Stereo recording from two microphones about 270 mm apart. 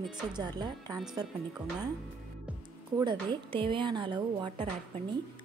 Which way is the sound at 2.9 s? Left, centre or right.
Centre.